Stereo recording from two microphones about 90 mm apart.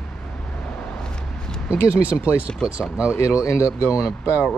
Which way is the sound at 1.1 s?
10° left (ahead or behind).